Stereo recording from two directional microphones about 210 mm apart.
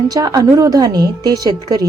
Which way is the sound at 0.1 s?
20° right (ahead or behind).